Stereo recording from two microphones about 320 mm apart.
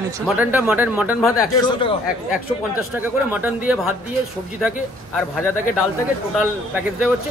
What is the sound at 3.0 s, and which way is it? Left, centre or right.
Speech, centre.